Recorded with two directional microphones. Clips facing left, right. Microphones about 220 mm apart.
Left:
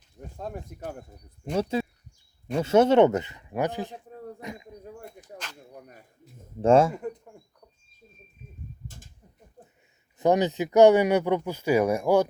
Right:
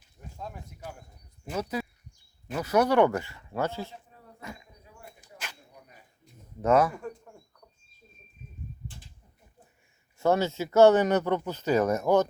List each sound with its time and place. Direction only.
0.3 s speech: 50° left (ahead or behind)
1.5 s speech: 25° left (ahead or behind)
4.4 s a sound: 20° left (ahead or behind)
4.8 s a sound: 50° left (ahead or behind)
6.6 s speech: 25° left (ahead or behind)
10.2 s speech: 15° left (ahead or behind)